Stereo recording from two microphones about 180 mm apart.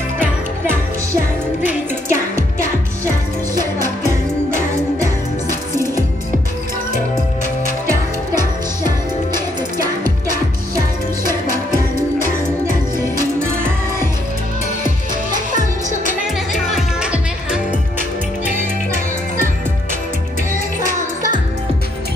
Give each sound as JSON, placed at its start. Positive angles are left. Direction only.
{"t": 1.6, "sound": "music", "side_deg": -10}
{"t": 9.8, "sound": "music", "side_deg": -50}
{"t": 16.7, "sound": "music", "side_deg": -5}